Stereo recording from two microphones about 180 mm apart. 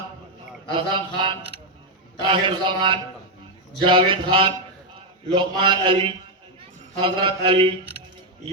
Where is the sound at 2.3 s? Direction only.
30° right (ahead or behind).